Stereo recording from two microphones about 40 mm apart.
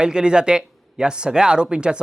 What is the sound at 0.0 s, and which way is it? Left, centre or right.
Speech, centre.